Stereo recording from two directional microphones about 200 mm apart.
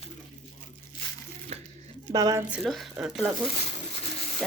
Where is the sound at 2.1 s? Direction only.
20° right (ahead or behind).